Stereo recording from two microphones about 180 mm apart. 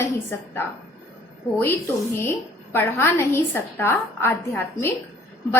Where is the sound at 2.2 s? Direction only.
15° left (ahead or behind).